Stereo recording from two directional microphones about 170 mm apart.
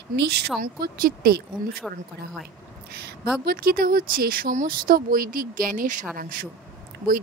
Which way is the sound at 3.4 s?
60° right (ahead or behind).